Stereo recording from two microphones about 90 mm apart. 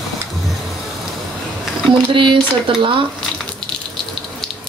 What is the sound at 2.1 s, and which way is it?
Speech, 70° right (ahead or behind).